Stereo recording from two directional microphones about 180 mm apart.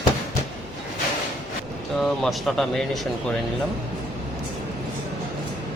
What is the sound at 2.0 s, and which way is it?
Speech, centre (ahead or behind).